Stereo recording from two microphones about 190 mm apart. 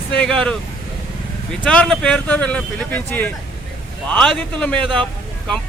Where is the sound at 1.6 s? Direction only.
5° left (ahead or behind).